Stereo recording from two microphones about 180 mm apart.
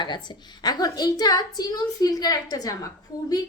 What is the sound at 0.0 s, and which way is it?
A woman's voice, 25° left (ahead or behind).